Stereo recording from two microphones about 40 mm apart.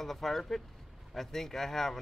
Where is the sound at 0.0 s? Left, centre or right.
Centre.